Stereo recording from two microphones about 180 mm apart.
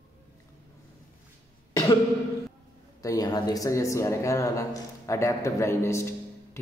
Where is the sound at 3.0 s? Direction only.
20° left (ahead or behind).